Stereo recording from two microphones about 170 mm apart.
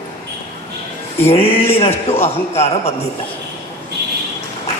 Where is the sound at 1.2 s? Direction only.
35° left (ahead or behind).